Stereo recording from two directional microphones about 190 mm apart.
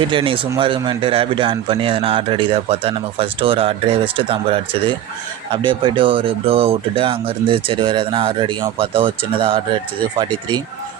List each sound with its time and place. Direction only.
0.1 s a man's voice: 25° right (ahead or behind)